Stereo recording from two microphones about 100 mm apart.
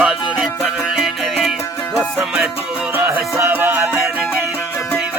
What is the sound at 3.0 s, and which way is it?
Music, 25° right (ahead or behind).